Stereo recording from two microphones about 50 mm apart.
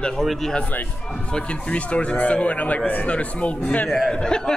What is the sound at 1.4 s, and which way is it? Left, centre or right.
Speech, left.